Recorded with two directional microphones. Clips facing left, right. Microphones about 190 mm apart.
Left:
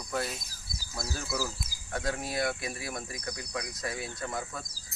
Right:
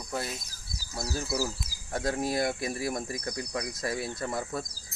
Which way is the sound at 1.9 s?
45° right (ahead or behind).